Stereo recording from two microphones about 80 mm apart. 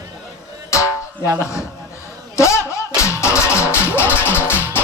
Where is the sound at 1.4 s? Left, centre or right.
Left.